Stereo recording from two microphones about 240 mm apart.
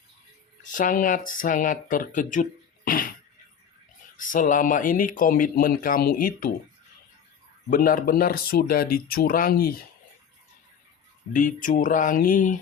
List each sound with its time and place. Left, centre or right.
0.6 s speech: left
4.2 s speech: left
7.7 s speech: left
11.3 s speech: left